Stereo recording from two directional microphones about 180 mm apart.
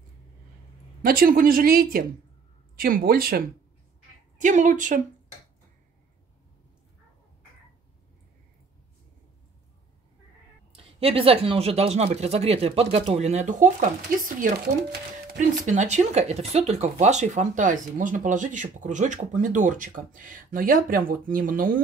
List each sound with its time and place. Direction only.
1.0 s speech: 50° right (ahead or behind)
4.4 s speech: 45° right (ahead or behind)
10.7 s speech: 30° right (ahead or behind); by 21.8 s 50° right (ahead or behind)